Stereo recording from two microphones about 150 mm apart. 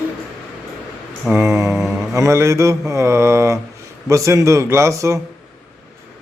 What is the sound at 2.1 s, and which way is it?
Mantra, 20° right (ahead or behind).